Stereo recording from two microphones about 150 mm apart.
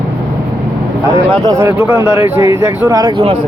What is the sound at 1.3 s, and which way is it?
Speech, 25° right (ahead or behind).